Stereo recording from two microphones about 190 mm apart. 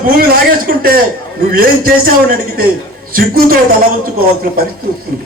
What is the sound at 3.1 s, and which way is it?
Speech, 50° right (ahead or behind).